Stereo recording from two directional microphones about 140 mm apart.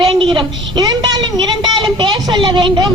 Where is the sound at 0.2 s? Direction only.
35° right (ahead or behind).